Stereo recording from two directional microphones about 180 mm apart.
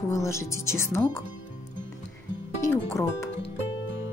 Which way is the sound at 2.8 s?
15° left (ahead or behind).